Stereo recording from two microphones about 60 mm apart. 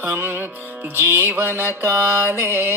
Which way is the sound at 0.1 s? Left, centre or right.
Right.